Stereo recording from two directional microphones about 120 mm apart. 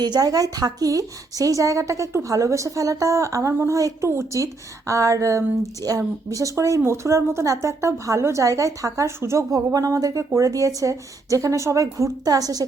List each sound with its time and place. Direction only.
0.0 s speech: 30° right (ahead or behind)